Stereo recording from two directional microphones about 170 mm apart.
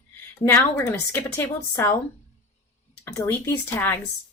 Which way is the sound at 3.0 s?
15° left (ahead or behind).